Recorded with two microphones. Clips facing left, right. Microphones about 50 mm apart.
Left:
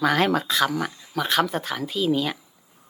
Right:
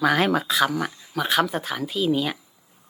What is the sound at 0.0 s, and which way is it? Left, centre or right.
Speech, centre.